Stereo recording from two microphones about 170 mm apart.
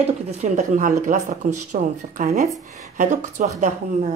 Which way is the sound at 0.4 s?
45° right (ahead or behind).